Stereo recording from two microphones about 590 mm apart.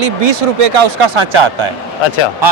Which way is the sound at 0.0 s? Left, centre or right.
Right.